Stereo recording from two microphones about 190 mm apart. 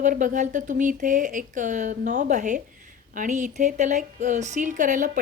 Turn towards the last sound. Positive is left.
turn(degrees=-45)  # may be behind; listen again after turning